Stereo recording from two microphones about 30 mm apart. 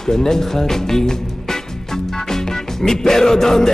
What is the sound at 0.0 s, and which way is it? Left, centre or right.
Speech, centre.